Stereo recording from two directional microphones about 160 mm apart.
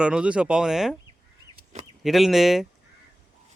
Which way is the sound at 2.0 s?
Centre (ahead or behind).